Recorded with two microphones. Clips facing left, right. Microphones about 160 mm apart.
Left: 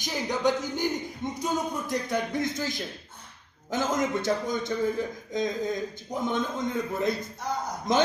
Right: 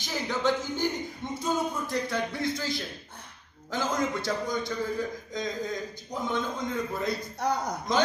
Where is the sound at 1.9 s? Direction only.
20° left (ahead or behind).